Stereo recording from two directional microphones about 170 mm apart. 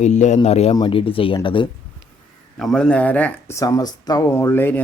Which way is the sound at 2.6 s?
Centre (ahead or behind).